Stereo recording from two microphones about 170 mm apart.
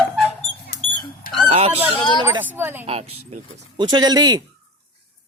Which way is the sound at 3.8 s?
25° right (ahead or behind).